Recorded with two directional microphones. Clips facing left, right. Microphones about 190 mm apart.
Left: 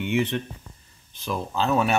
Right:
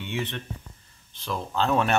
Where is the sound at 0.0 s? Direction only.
10° left (ahead or behind).